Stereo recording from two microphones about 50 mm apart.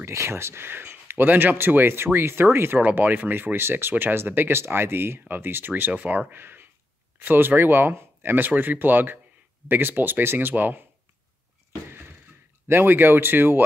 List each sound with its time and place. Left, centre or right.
0.0 s speech: right
2.8 s speech: right
11.9 s a sound: right
12.6 s speech: right